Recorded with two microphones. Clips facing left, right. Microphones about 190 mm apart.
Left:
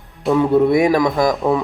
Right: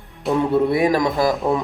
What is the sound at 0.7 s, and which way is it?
Speech, 15° left (ahead or behind).